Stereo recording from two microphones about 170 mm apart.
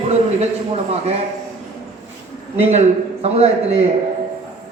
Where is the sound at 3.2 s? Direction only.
40° right (ahead or behind).